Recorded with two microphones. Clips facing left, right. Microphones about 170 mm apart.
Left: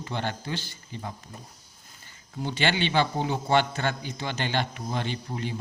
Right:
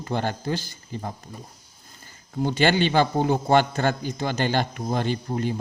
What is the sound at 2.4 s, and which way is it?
A man's voice, 45° right (ahead or behind).